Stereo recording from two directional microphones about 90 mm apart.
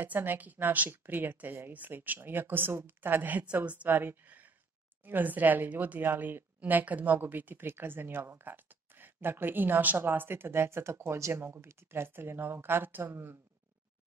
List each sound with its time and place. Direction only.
0.0 s a woman's voice: 20° right (ahead or behind)